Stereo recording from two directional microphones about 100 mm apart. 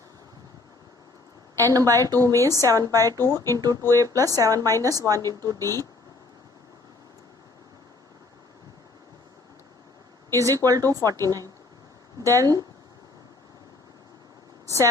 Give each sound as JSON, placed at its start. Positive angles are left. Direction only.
{"t": 1.6, "sound": "speech", "side_deg": -35}
{"t": 10.3, "sound": "speech", "side_deg": -35}